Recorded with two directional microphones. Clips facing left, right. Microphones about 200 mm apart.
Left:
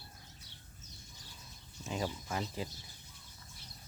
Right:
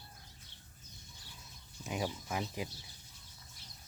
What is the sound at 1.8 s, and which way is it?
Speech, 15° right (ahead or behind).